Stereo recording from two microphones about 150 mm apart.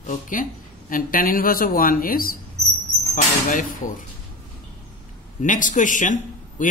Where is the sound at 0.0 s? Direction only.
60° left (ahead or behind).